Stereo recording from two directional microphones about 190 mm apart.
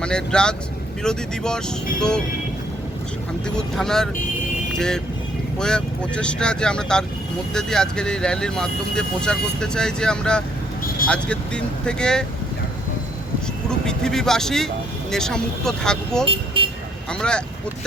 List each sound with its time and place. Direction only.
0.0 s speech: 5° left (ahead or behind)
3.4 s speech: 5° left (ahead or behind)
5.5 s speech: 5° left (ahead or behind)
13.8 s speech: 5° left (ahead or behind)
16.2 s vehicle: 30° right (ahead or behind)
17.1 s speech: 5° left (ahead or behind)